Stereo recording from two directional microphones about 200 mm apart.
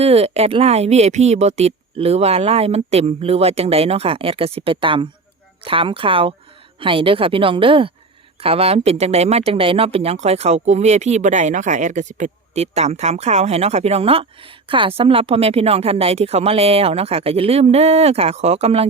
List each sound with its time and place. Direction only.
0.0 s a woman's voice: 30° right (ahead or behind)